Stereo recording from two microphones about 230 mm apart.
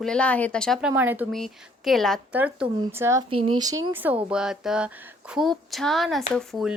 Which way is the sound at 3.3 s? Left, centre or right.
Right.